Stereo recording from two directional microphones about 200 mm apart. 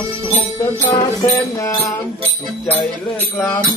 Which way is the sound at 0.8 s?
15° left (ahead or behind).